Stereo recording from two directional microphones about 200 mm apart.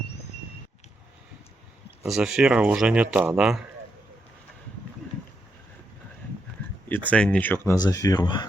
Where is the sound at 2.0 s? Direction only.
5° right (ahead or behind).